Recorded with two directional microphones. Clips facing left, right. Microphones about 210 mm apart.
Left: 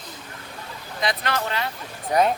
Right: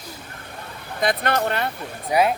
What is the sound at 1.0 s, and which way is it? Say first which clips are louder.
Speech: right 4 dB; 55° right (ahead or behind).